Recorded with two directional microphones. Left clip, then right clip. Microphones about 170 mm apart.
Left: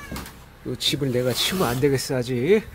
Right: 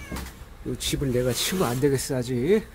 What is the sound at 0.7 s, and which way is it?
Speech, 5° right (ahead or behind).